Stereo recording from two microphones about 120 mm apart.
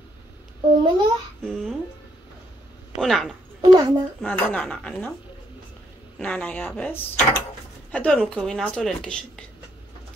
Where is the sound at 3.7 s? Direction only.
40° right (ahead or behind).